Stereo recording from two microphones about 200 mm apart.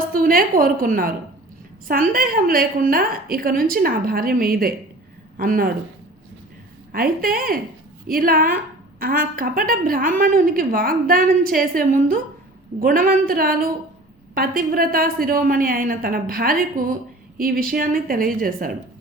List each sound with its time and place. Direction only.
0.1 s a woman's voice: 45° right (ahead or behind)
6.9 s a woman's voice: 45° right (ahead or behind)